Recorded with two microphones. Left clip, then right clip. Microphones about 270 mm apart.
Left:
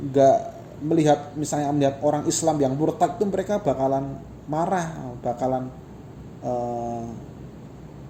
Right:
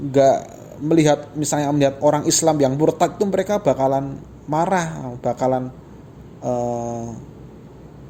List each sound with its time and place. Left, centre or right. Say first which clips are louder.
0.1 s a man's voice: right 2 dB; right